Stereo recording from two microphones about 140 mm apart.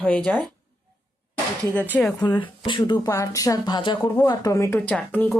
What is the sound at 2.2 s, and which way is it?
A woman's voice, 35° left (ahead or behind).